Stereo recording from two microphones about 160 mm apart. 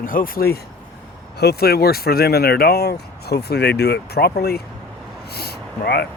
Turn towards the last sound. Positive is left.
turn(degrees=80)